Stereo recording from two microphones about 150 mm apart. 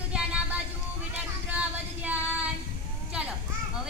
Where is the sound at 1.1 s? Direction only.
10° right (ahead or behind).